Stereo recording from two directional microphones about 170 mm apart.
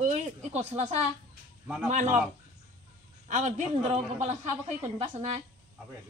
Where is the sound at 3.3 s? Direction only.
45° right (ahead or behind).